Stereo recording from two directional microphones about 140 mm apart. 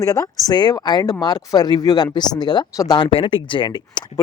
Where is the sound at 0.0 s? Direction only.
25° left (ahead or behind).